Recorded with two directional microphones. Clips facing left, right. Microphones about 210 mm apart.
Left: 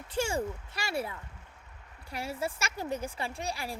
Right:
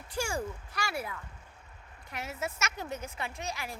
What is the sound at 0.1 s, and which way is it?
A woman's voice, 25° left (ahead or behind).